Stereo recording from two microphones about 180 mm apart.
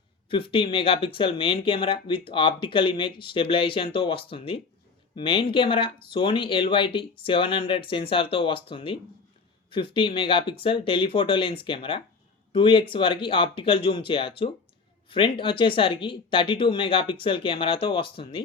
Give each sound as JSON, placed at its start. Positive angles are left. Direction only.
{"t": 0.3, "sound": "speech", "side_deg": 30}